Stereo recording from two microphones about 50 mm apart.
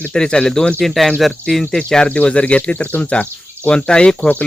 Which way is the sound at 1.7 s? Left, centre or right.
Centre.